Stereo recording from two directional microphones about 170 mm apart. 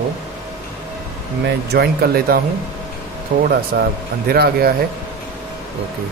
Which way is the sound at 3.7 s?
65° right (ahead or behind).